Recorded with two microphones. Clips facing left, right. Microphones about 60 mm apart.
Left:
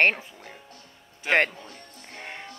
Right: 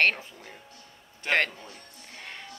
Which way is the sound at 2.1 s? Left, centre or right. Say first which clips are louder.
Left 4 dB; left.